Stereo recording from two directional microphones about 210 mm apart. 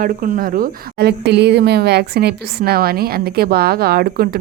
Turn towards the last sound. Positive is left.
turn(degrees=-45)  # may be behind; listen again after turning